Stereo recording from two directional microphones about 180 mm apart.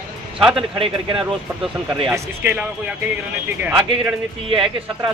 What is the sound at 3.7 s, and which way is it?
A man's voice, 25° right (ahead or behind).